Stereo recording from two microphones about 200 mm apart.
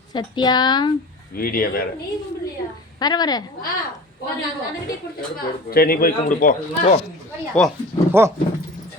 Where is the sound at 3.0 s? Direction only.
20° left (ahead or behind).